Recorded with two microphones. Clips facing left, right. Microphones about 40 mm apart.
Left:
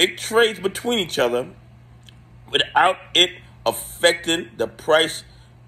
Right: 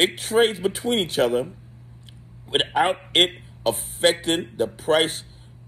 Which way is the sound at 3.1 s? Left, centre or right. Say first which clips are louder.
Left 1 dB; left.